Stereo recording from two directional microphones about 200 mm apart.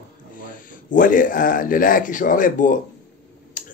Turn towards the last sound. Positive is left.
turn(degrees=40)  # may be behind; listen again after turning